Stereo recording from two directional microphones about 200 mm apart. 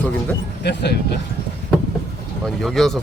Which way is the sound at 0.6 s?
60° left (ahead or behind).